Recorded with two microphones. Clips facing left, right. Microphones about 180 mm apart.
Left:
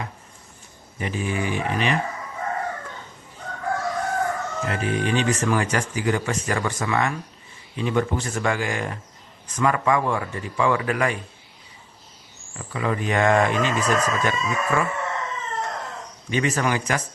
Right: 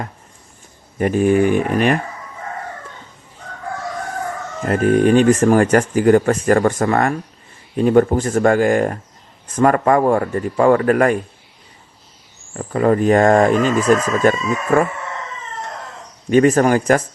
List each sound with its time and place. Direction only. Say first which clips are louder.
0.9 s speech: right 12 dB; 50° right (ahead or behind)
4.6 s speech: right 12 dB; 45° right (ahead or behind)
12.5 s speech: right 10 dB; 45° right (ahead or behind)
16.3 s speech: right 11 dB; 50° right (ahead or behind)